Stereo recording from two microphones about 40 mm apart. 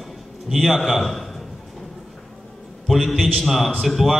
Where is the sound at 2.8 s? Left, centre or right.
Centre.